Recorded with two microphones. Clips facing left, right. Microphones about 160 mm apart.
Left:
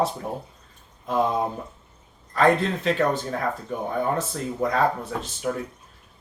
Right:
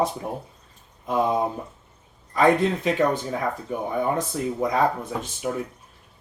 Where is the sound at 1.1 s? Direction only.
15° right (ahead or behind).